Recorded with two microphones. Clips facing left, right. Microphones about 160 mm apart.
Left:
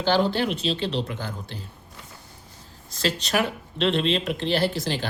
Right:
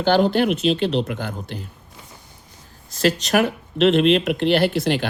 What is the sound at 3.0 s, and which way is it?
Speech, 50° right (ahead or behind).